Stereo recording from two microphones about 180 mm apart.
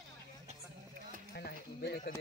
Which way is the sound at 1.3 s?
60° left (ahead or behind).